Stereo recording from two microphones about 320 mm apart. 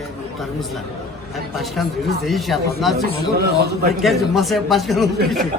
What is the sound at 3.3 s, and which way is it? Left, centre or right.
Speech, right.